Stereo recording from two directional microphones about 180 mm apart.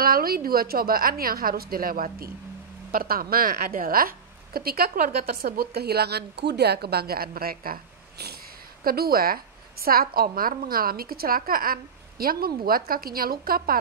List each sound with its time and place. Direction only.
0.0 s a woman's voice: 55° right (ahead or behind)